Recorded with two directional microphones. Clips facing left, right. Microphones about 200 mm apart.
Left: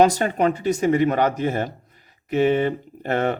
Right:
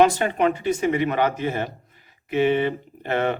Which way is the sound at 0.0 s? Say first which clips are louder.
Left 1 dB; 40° left (ahead or behind).